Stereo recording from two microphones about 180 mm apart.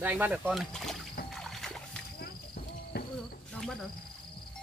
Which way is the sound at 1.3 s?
Centre (ahead or behind).